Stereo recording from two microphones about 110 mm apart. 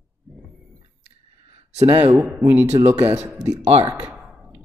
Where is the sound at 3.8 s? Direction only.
10° right (ahead or behind).